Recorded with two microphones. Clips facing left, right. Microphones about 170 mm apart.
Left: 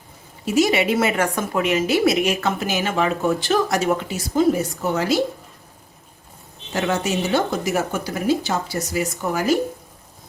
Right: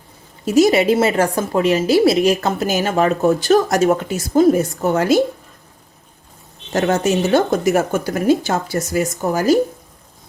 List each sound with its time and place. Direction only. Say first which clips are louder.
0.4 s a woman's voice: right 5 dB; 40° right (ahead or behind)
6.7 s speech: right 5 dB; 45° right (ahead or behind)